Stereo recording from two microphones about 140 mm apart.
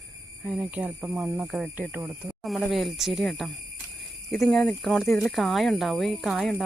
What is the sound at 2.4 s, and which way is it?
Speech, centre (ahead or behind).